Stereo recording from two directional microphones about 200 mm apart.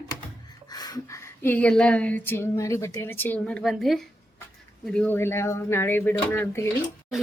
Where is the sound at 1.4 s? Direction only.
10° left (ahead or behind).